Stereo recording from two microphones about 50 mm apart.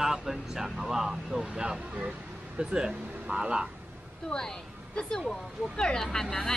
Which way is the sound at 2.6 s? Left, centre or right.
Centre.